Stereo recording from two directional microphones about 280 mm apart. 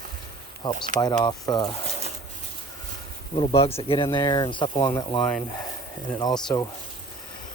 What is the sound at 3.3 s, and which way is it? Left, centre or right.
Speech, centre.